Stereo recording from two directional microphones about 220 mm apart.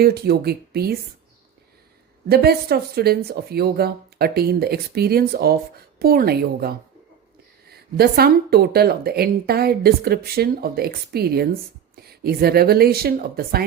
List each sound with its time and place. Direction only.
0.0 s speech: 45° right (ahead or behind)
2.3 s speech: 45° right (ahead or behind)